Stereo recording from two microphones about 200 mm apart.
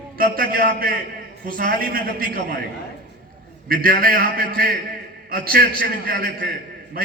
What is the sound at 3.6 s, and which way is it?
A man's voice, 45° right (ahead or behind).